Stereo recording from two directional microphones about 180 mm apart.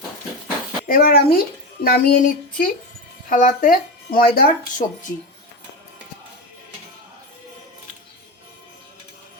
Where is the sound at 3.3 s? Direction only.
50° left (ahead or behind).